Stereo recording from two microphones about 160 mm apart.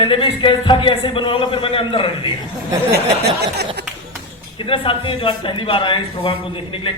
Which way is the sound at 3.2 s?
90° right.